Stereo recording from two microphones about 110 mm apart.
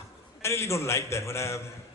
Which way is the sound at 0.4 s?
25° left (ahead or behind).